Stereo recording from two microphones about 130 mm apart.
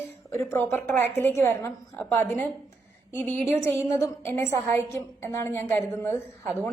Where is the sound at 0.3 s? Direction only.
20° left (ahead or behind).